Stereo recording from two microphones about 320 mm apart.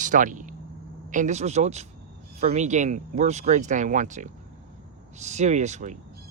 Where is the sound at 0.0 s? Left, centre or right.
Right.